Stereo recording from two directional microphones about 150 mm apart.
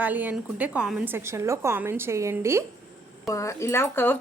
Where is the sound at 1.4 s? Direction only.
20° right (ahead or behind).